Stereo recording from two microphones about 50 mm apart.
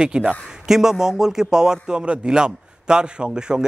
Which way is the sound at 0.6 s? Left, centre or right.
Centre.